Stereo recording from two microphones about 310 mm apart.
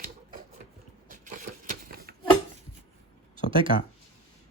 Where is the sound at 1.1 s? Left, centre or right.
Right.